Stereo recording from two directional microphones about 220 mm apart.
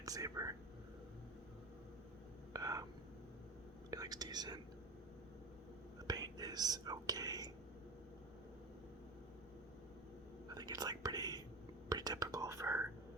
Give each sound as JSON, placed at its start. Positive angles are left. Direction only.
{"t": 0.0, "sound": "speech", "side_deg": -15}
{"t": 2.5, "sound": "whispering", "side_deg": -15}
{"t": 3.9, "sound": "whispering", "side_deg": -15}
{"t": 6.1, "sound": "whispering", "side_deg": -20}
{"t": 10.5, "sound": "whispering", "side_deg": -20}